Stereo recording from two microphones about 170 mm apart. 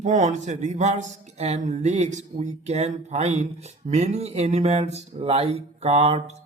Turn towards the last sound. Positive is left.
turn(degrees=-35)  # may be behind; listen again after turning